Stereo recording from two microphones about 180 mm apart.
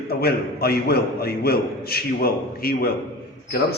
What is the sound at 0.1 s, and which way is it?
A man's voice, 60° left (ahead or behind).